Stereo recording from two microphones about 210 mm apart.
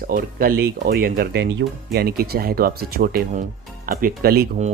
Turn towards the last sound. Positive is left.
turn(degrees=-45)  # may be behind; listen again after turning